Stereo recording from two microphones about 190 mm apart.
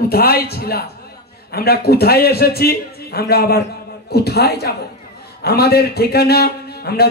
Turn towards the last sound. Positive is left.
turn(degrees=55)  # may be behind; listen again after turning